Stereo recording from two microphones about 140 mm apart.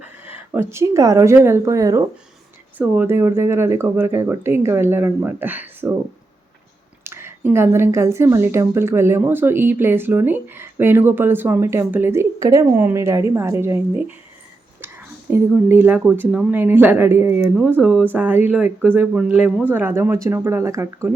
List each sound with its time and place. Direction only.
0.5 s speech: 20° right (ahead or behind)
2.7 s speech: 10° right (ahead or behind)
7.0 s speech: 15° right (ahead or behind)